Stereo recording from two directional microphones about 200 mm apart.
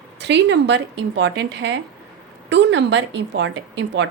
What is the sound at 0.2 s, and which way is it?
A woman's voice, 60° right (ahead or behind).